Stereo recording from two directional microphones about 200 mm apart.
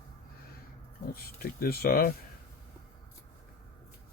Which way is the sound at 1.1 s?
50° left (ahead or behind).